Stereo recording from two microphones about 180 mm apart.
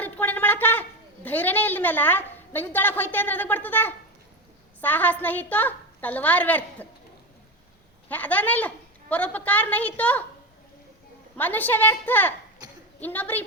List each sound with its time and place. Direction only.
0.0 s a woman's voice: 10° left (ahead or behind)
8.1 s a woman's voice: 10° left (ahead or behind)
11.3 s a woman's voice: 10° left (ahead or behind)
12.6 s a sound: 20° right (ahead or behind)
13.0 s a woman's voice: 10° left (ahead or behind)